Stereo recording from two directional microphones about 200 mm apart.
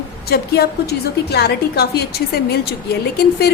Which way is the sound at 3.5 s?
55° left (ahead or behind).